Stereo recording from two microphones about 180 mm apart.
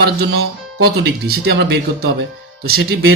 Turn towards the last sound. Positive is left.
turn(degrees=-60)  # may be behind; listen again after turning